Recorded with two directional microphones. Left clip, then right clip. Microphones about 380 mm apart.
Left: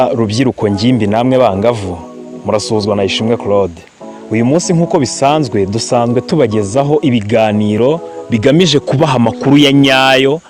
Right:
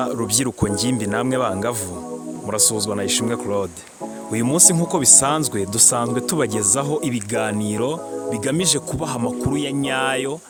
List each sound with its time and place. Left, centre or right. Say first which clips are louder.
0.0 s speech: left 10 dB; right
8.3 s speech: left 12 dB; right